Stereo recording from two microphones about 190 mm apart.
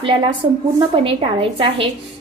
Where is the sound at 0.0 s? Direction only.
25° right (ahead or behind).